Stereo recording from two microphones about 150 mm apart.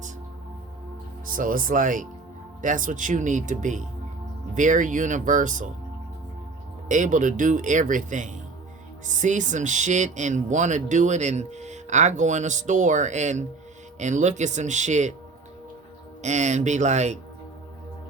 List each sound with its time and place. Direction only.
1.4 s speech: 65° right (ahead or behind)
6.8 s speech: 55° right (ahead or behind)
16.2 s speech: 50° right (ahead or behind)